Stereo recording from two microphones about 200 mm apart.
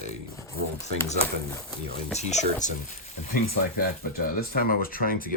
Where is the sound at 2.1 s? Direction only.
35° left (ahead or behind).